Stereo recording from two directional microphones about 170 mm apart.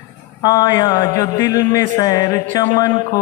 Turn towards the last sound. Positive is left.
turn(degrees=20)  # may be behind; listen again after turning